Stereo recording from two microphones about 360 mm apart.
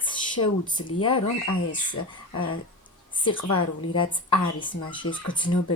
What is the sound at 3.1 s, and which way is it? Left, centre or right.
Speech, centre.